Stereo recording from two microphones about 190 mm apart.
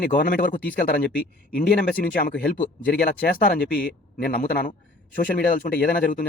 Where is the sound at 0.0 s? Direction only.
50° left (ahead or behind).